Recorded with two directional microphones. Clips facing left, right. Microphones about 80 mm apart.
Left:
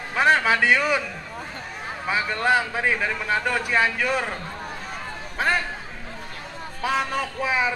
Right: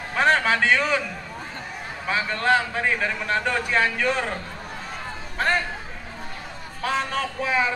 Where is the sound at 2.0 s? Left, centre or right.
Centre.